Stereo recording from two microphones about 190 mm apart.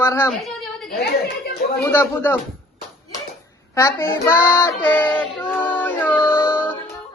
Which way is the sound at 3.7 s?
15° left (ahead or behind).